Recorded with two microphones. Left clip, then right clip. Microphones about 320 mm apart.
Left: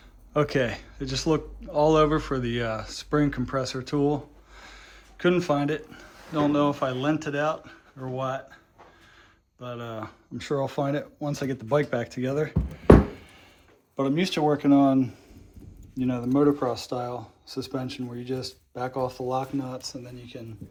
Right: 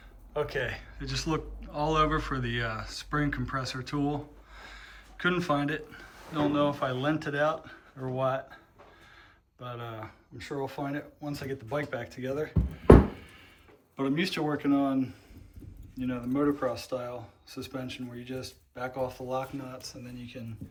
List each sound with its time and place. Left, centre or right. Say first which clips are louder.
0.3 s speech: left 7 dB; left; by 8.5 s centre
9.6 s speech: left 5 dB; centre